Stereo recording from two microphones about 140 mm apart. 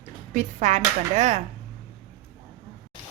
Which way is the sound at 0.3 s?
60° right (ahead or behind).